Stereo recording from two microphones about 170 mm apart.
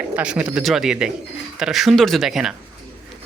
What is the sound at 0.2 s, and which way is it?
Speech, 5° right (ahead or behind).